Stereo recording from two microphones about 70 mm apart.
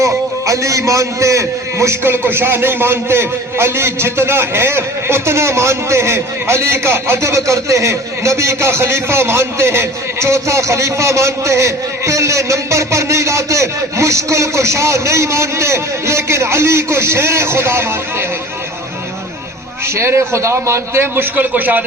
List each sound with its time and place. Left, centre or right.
0.0 s a man's voice: right
20.0 s a man's voice: right
21.3 s a man's voice: right